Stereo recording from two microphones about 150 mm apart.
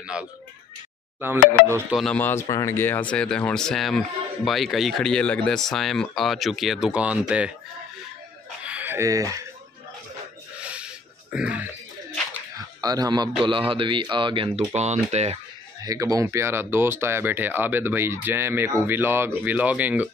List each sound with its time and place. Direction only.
0.0 s speech: 5° right (ahead or behind)
2.0 s speech: 10° left (ahead or behind); by 7.5 s 10° right (ahead or behind)
8.6 s a sound: 10° right (ahead or behind)
10.6 s a sound: 10° right (ahead or behind)
12.8 s speech: 25° right (ahead or behind)
14.7 s speech: 45° right (ahead or behind)
15.8 s speech: 25° right (ahead or behind)